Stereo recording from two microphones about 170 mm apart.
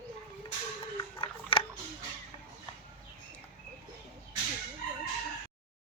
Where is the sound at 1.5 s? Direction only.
30° left (ahead or behind).